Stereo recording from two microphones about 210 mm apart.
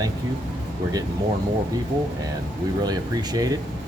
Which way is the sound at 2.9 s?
15° right (ahead or behind).